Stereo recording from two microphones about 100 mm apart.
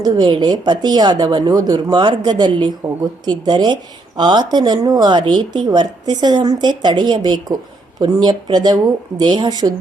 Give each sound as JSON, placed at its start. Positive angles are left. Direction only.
{"t": 0.0, "sound": "a woman's voice", "side_deg": -45}